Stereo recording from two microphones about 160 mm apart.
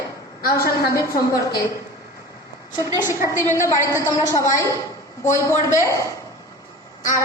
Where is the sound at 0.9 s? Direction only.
20° left (ahead or behind).